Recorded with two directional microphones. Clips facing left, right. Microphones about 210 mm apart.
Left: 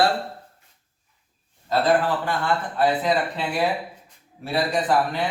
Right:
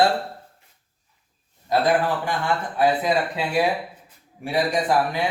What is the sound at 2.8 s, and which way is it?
Speech, 10° right (ahead or behind).